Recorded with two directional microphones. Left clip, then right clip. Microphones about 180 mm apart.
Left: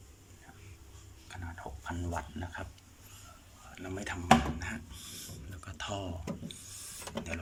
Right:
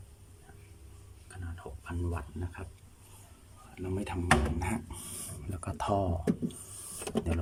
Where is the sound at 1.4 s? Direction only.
5° right (ahead or behind).